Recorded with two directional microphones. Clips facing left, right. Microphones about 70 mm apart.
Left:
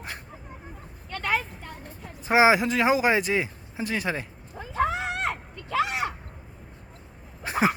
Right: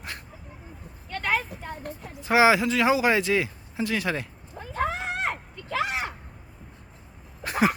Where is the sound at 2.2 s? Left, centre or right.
Left.